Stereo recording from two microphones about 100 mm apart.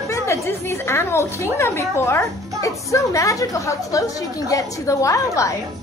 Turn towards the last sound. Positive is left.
turn(degrees=30)  # may be behind; listen again after turning